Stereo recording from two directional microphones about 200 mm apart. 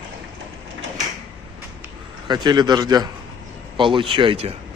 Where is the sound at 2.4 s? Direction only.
20° right (ahead or behind).